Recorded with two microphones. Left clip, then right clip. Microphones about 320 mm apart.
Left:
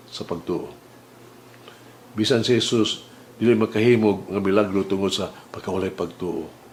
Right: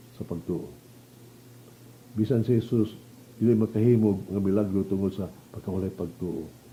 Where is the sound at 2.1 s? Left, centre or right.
Centre.